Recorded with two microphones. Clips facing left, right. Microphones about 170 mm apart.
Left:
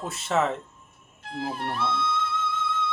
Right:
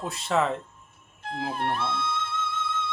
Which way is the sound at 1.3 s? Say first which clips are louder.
Right 1 dB; 55° right (ahead or behind).